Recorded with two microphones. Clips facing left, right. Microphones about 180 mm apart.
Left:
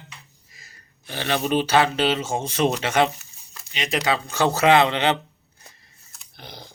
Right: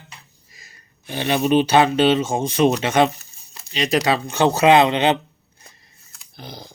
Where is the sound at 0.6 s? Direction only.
20° right (ahead or behind).